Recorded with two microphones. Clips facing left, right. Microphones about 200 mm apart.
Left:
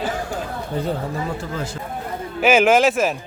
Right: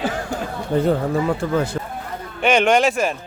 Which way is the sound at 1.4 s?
65° right (ahead or behind).